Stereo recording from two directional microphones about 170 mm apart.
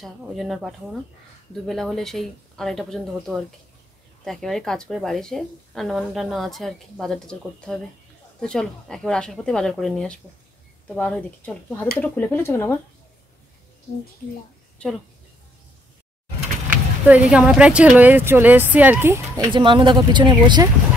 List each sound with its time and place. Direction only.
0.0 s speech: centre (ahead or behind)
17.1 s speech: 5° right (ahead or behind)
19.5 s speech: 30° right (ahead or behind)